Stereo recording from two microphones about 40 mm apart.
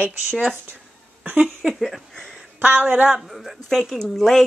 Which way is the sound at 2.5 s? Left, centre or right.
Right.